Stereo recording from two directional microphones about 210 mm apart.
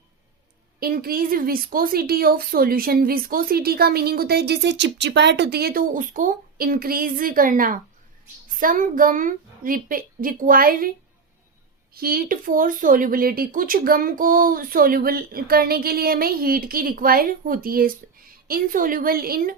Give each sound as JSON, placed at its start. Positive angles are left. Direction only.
{"t": 0.8, "sound": "a woman's voice", "side_deg": -45}
{"t": 11.9, "sound": "a woman's voice", "side_deg": -45}